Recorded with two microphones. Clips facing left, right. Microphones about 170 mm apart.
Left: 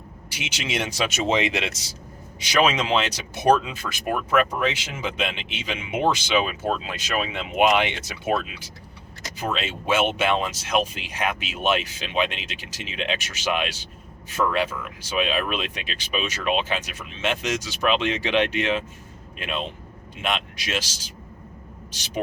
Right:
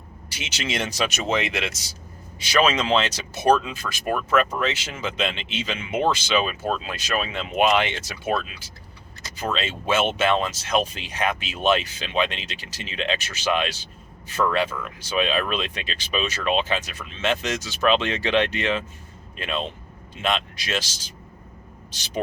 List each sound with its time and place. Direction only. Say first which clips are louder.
0.3 s speech: even; 15° left (ahead or behind)
1.1 s speech: left 2 dB; 25° left (ahead or behind)
2.4 s speech: even; 15° left (ahead or behind)